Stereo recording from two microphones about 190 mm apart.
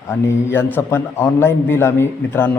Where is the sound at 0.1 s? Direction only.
10° left (ahead or behind).